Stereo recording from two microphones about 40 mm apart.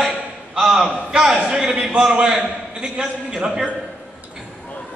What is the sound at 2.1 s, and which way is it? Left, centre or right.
A man's voice, centre.